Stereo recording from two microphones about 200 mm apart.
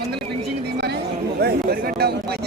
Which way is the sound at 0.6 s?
55° right (ahead or behind).